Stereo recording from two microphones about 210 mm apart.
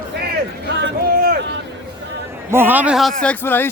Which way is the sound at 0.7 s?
50° right (ahead or behind).